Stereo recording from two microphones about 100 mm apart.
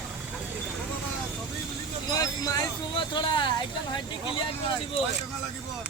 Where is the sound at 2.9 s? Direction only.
50° left (ahead or behind).